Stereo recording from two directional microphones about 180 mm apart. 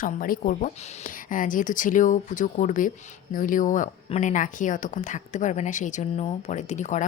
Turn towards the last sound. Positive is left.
turn(degrees=40)  # may be behind; listen again after turning